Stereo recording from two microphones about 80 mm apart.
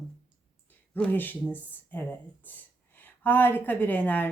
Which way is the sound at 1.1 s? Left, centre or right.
Left.